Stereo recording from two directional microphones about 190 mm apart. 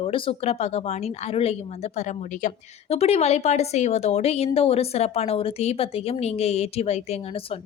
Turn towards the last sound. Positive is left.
turn(degrees=35)  # may be behind; listen again after turning